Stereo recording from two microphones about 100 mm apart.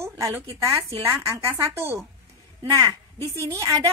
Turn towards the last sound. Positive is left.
turn(degrees=-35)  # may be behind; listen again after turning